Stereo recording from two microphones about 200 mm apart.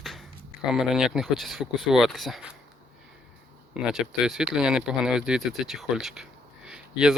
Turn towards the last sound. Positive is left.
turn(degrees=-5)  # may be behind; listen again after turning